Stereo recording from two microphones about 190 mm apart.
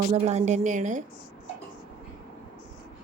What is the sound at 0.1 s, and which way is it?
Speech, 35° right (ahead or behind).